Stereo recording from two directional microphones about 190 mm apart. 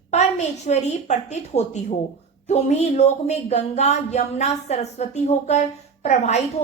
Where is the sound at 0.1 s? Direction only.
35° left (ahead or behind).